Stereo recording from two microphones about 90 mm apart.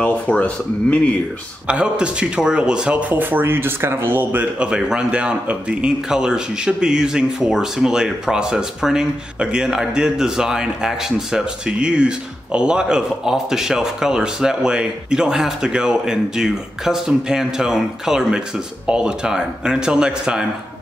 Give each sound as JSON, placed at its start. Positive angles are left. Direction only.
{"t": 0.0, "sound": "speech", "side_deg": 15}
{"t": 1.7, "sound": "speech", "side_deg": -10}
{"t": 4.6, "sound": "speech", "side_deg": -10}